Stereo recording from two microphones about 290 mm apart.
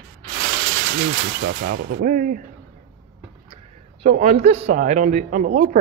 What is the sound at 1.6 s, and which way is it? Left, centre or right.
Speech, right.